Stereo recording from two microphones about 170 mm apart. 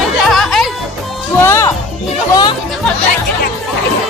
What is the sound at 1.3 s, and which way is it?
Speech, 15° left (ahead or behind).